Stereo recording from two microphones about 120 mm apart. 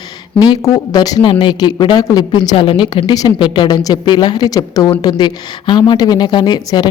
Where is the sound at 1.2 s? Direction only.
45° left (ahead or behind).